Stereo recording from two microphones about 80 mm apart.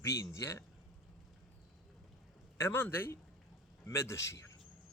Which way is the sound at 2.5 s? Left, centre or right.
Left.